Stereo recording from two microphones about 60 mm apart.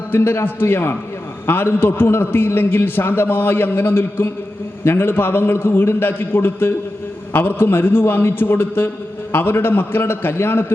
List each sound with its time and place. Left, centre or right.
0.1 s a man's voice: left